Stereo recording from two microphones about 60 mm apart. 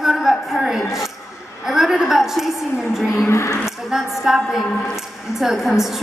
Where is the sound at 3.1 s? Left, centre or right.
Left.